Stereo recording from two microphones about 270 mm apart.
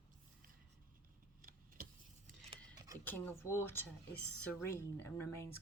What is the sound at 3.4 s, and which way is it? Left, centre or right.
Speech, centre.